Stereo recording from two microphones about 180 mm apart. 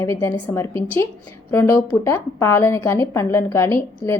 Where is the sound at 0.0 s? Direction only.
15° left (ahead or behind).